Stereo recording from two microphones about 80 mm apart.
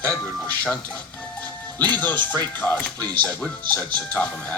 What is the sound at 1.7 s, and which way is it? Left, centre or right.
Speech, left.